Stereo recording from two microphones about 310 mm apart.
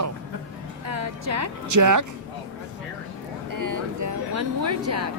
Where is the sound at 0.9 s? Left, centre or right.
Right.